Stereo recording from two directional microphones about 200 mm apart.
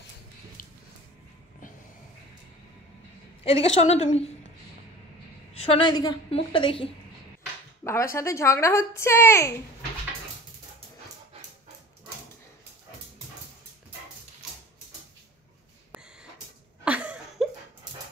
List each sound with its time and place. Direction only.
3.4 s a woman's voice: 30° left (ahead or behind)
5.5 s a woman's voice: 30° left (ahead or behind)
7.8 s speech: 15° left (ahead or behind)
15.9 s a sound: 5° right (ahead or behind)